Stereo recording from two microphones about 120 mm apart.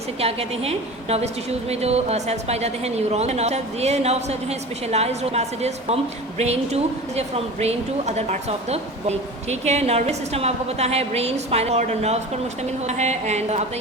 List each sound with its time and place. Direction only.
0.2 s a woman's voice: 55° right (ahead or behind)
12.8 s music: 70° right (ahead or behind)